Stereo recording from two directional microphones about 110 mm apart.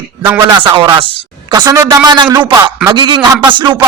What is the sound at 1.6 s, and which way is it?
Speech, 30° right (ahead or behind).